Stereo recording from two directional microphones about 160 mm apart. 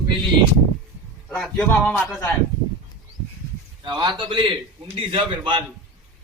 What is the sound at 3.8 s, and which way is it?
A man's voice, 30° right (ahead or behind).